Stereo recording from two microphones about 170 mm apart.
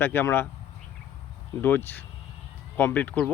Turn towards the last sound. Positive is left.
turn(degrees=10)  # may be behind; listen again after turning